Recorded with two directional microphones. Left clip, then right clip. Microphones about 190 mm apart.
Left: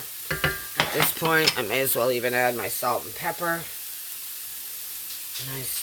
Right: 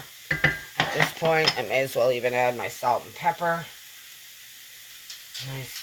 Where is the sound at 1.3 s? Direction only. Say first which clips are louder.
Left 1 dB; 50° left (ahead or behind).